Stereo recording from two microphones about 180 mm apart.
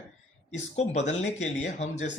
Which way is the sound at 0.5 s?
40° left (ahead or behind).